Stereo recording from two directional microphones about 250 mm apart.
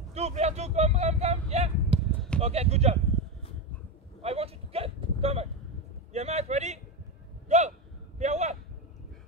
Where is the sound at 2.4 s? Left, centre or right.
Right.